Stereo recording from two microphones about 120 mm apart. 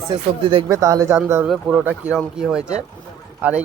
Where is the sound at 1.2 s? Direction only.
15° right (ahead or behind).